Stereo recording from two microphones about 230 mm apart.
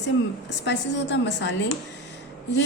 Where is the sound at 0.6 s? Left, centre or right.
Left.